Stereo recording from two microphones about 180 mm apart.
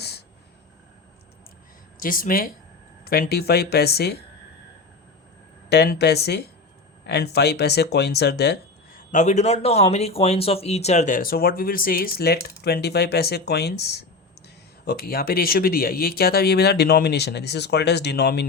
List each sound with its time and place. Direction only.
0.0 s a sound: 65° left (ahead or behind)
2.0 s speech: 50° left (ahead or behind)
5.6 s speech: 65° left (ahead or behind)
9.1 s speech: 40° left (ahead or behind); by 18.4 s 65° left (ahead or behind)